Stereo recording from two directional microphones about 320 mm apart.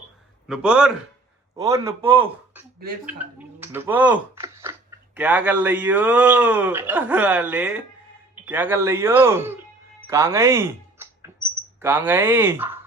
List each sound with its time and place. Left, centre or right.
0.4 s speech: centre